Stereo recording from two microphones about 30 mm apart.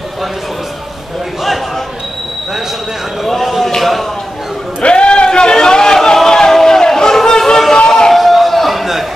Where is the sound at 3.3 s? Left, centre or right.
Centre.